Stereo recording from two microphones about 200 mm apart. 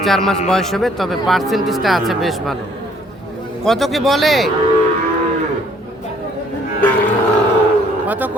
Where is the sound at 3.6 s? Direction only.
Centre (ahead or behind).